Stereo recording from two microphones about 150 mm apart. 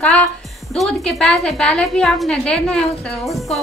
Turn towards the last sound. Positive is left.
turn(degrees=0)  # may be behind; listen again after turning